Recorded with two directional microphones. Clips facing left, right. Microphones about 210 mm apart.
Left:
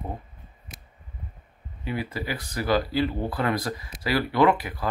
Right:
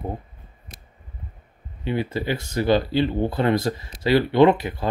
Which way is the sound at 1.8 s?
25° right (ahead or behind).